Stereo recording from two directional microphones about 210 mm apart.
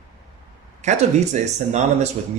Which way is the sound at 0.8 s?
35° right (ahead or behind).